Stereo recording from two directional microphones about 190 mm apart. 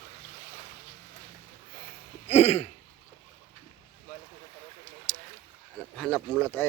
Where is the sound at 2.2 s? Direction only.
35° left (ahead or behind).